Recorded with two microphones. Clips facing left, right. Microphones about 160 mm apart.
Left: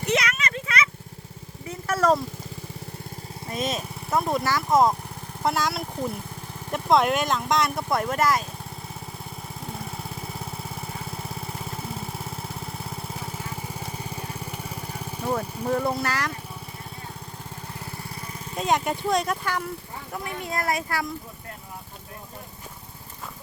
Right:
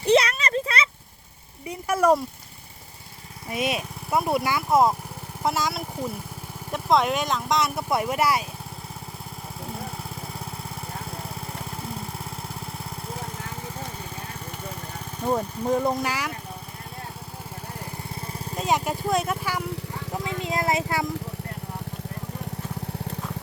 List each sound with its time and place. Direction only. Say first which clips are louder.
0.0 s a sound: right 6 dB; 30° right (ahead or behind)
1.6 s vehicle: right 2 dB; 15° right (ahead or behind)
3.5 s speech: right 2 dB; 10° right (ahead or behind)
10.0 s lawn mower: left 1 dB; centre (ahead or behind)
15.3 s speech: right 2 dB; 15° right (ahead or behind)
18.5 s speech: left 1 dB; centre (ahead or behind)
20.2 s a woman's voice: right 2 dB; 20° right (ahead or behind)